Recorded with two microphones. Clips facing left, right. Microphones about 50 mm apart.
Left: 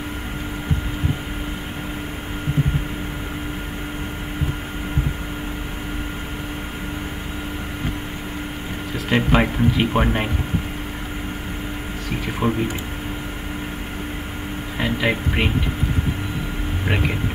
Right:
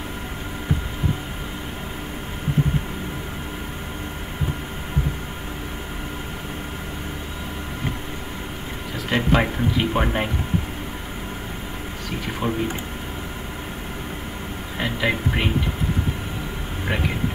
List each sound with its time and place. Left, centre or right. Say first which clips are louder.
9.1 s speech: left 2 dB; centre
12.4 s speech: left 4 dB; left
14.8 s speech: left 2 dB; centre